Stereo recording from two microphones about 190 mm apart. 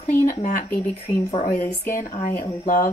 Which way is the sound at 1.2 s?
35° left (ahead or behind).